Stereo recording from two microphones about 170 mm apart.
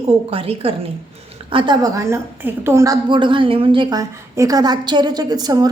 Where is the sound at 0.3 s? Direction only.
35° right (ahead or behind).